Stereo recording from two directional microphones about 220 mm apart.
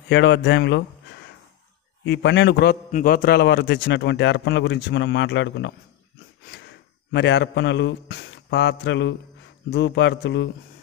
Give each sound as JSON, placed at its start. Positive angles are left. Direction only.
{"t": 0.1, "sound": "a man's voice", "side_deg": 50}
{"t": 2.0, "sound": "a man's voice", "side_deg": 55}